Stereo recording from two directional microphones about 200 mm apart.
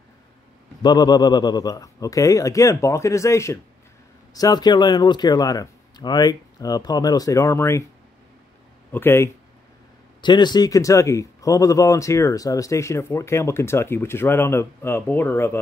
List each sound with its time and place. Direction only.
0.8 s speech: 20° left (ahead or behind)
8.9 s speech: 10° left (ahead or behind)
10.2 s speech: 20° left (ahead or behind)